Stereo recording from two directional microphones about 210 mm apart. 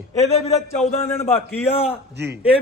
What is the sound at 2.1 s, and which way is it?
Speech, 50° right (ahead or behind).